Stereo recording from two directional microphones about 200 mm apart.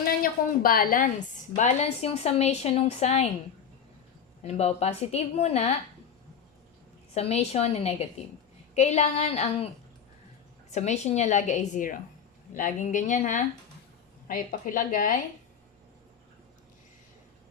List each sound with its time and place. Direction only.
0.2 s a woman's voice: 45° left (ahead or behind)
4.4 s a woman's voice: 30° left (ahead or behind)
7.1 s a woman's voice: 30° left (ahead or behind)
10.7 s a woman's voice: 35° left (ahead or behind)